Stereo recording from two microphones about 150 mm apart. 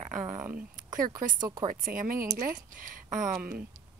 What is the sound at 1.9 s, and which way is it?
A woman's voice, 70° right (ahead or behind).